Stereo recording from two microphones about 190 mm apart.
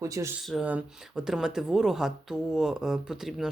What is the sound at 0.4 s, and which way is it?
Speech, 5° right (ahead or behind).